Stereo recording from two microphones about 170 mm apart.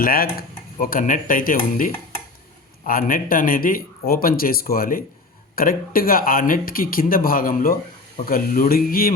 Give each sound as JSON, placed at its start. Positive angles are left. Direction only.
{"t": 0.0, "sound": "a man's voice", "side_deg": 60}